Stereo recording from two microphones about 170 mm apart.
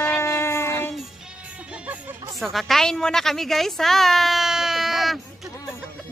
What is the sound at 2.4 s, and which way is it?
A woman's voice, centre (ahead or behind).